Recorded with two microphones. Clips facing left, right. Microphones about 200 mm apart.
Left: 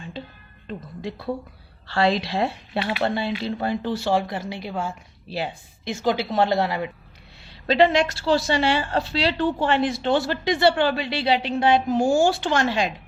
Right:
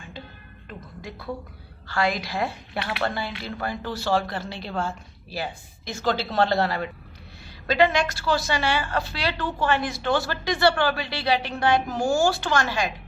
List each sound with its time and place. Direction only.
0.7 s a woman's voice: 30° left (ahead or behind)
5.3 s a woman's voice: 25° left (ahead or behind)
7.4 s a woman's voice: 30° left (ahead or behind)